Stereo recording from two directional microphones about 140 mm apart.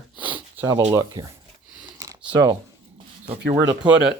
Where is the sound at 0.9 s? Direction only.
25° right (ahead or behind).